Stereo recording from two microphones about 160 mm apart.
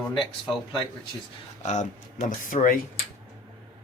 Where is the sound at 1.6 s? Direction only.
45° left (ahead or behind).